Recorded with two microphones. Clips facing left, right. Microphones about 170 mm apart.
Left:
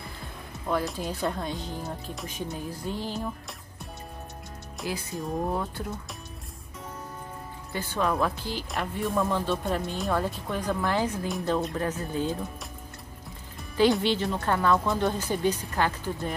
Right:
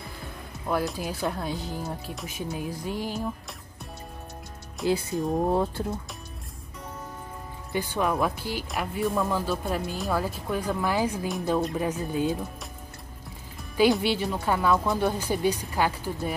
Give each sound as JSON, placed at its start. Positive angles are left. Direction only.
{"t": 0.7, "sound": "speech", "side_deg": -5}
{"t": 5.1, "sound": "speech", "side_deg": 0}
{"t": 5.5, "sound": "speech", "side_deg": -30}
{"t": 7.7, "sound": "speech", "side_deg": -15}
{"t": 13.9, "sound": "speech", "side_deg": -10}